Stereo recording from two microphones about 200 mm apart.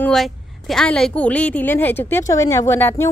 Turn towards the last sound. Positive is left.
turn(degrees=10)  # may be behind; listen again after turning